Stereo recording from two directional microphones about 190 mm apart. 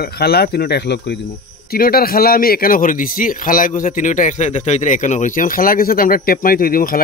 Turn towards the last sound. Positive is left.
turn(degrees=50)  # may be behind; listen again after turning